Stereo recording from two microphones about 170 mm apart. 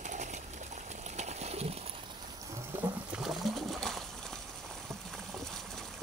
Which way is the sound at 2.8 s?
5° right (ahead or behind).